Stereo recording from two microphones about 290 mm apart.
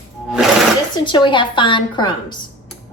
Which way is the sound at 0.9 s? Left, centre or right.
Centre.